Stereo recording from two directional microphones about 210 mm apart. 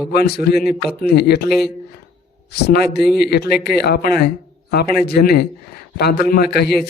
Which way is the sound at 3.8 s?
50° left (ahead or behind).